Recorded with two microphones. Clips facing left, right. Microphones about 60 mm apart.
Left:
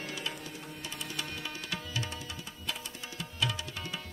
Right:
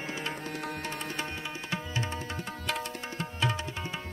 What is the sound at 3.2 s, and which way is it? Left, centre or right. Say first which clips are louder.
Tabla: right 3 dB; right.